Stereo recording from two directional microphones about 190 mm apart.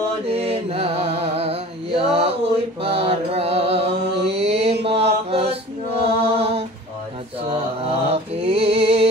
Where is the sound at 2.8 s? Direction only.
30° right (ahead or behind).